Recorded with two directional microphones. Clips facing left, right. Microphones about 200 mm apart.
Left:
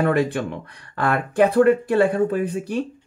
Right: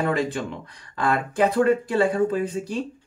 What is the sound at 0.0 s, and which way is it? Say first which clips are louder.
Speech: left 4 dB; 60° left (ahead or behind).